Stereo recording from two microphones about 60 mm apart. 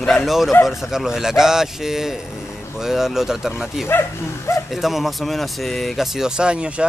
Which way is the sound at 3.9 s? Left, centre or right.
Left.